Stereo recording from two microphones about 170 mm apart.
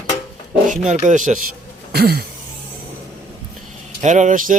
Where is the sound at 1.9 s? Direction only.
65° right (ahead or behind).